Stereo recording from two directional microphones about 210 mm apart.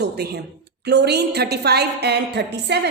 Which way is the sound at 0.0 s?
50° right (ahead or behind).